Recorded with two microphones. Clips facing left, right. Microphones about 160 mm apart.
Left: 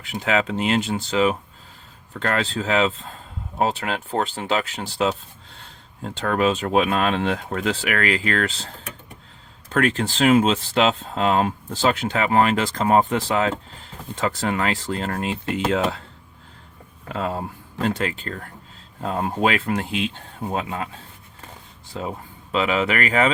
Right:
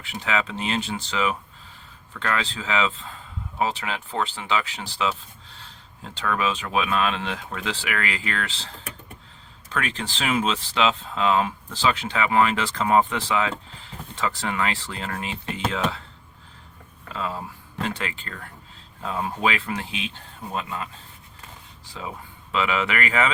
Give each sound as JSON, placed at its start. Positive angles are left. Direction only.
{"t": 0.0, "sound": "speech", "side_deg": 40}
{"t": 9.6, "sound": "speech", "side_deg": 50}
{"t": 17.1, "sound": "speech", "side_deg": 55}
{"t": 17.7, "sound": "speech", "side_deg": 40}
{"t": 22.0, "sound": "speech", "side_deg": 40}